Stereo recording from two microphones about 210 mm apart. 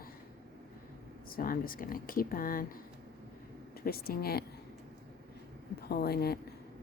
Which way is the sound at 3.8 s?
45° left (ahead or behind).